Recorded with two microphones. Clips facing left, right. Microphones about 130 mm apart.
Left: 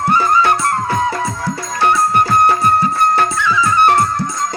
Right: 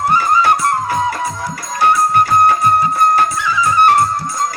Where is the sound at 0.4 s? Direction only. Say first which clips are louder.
Right 1 dB; 25° right (ahead or behind).